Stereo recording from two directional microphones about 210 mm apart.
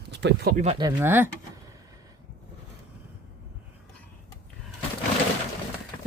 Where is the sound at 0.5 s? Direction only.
30° right (ahead or behind).